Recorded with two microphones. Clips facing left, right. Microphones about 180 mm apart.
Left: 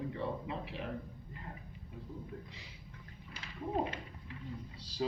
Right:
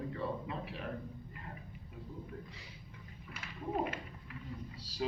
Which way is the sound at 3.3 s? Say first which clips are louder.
Left 1 dB; 30° left (ahead or behind).